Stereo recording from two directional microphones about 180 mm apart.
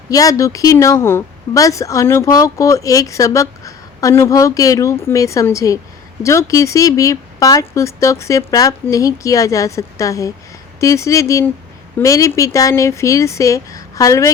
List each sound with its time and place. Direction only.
0.1 s speech: 20° left (ahead or behind)